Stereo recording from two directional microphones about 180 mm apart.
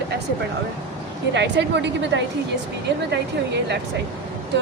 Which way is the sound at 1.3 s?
75° right (ahead or behind).